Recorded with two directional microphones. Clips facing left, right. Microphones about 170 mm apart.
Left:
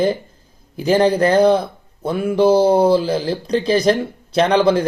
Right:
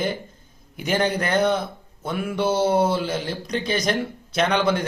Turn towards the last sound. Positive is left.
turn(degrees=30)  # may be behind; listen again after turning